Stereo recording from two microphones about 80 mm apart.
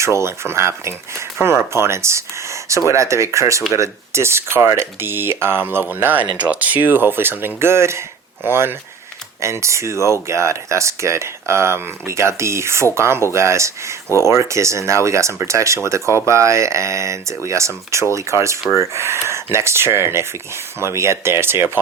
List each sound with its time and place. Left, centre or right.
0.0 s speech: right